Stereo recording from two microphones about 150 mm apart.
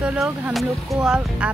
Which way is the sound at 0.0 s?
5° right (ahead or behind).